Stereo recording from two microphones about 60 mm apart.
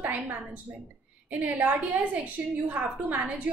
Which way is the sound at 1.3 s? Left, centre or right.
Right.